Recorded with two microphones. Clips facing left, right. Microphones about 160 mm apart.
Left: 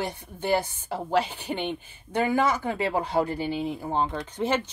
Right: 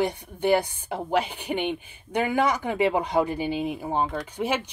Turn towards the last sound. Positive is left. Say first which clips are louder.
# even
turn(degrees=-10)  # may be behind; listen again after turning